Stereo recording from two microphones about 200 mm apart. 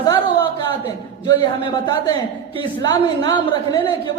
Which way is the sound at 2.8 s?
20° left (ahead or behind).